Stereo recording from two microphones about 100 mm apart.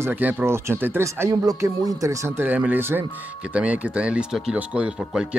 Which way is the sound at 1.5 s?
35° right (ahead or behind).